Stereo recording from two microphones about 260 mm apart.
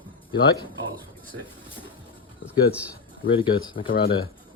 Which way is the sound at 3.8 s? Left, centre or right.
Left.